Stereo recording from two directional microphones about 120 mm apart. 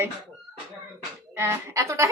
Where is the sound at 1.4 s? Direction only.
20° right (ahead or behind).